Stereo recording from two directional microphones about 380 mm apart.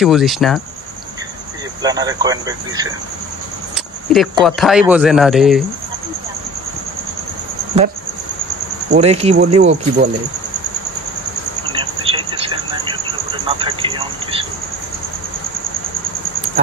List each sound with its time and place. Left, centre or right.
0.0 s speech: centre
1.8 s speech: centre
4.1 s speech: centre
8.9 s speech: centre
12.1 s radio: centre
13.5 s a sound: centre